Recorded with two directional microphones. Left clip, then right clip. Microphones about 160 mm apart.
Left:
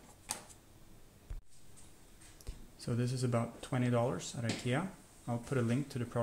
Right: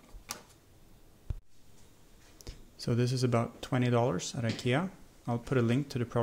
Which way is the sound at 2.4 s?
45° right (ahead or behind).